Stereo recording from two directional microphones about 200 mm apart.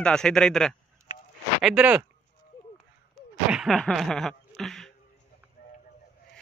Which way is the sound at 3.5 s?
Centre (ahead or behind).